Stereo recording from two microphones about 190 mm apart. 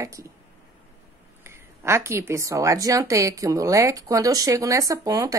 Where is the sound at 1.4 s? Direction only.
15° right (ahead or behind).